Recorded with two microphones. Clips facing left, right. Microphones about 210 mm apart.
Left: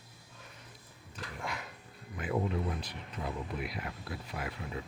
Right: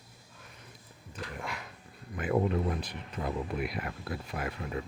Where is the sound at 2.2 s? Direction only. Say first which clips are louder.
Right 5 dB; 55° right (ahead or behind).